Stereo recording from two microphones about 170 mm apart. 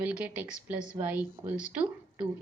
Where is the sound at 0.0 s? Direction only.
10° right (ahead or behind).